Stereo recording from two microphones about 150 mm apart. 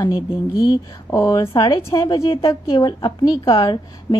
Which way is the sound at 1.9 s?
20° left (ahead or behind).